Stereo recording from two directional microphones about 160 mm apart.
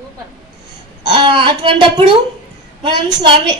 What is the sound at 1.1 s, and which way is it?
A woman's voice, 30° right (ahead or behind).